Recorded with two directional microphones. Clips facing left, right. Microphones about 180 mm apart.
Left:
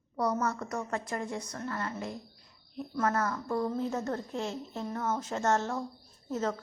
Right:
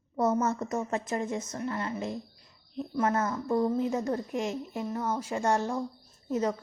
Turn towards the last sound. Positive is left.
turn(degrees=-15)  # may be behind; listen again after turning